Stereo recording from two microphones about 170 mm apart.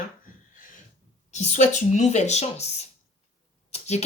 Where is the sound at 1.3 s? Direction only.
40° left (ahead or behind).